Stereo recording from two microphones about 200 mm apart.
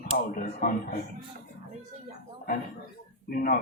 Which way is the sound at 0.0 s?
40° left (ahead or behind).